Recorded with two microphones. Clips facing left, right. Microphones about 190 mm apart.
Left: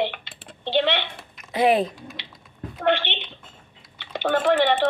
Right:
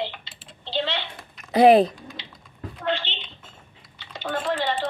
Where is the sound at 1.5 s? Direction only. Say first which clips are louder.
Right 5 dB; 40° right (ahead or behind).